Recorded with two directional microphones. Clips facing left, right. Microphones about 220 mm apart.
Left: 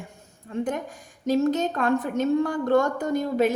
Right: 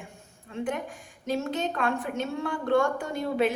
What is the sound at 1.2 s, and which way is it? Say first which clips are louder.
A woman's voice: left 7 dB; 40° left (ahead or behind).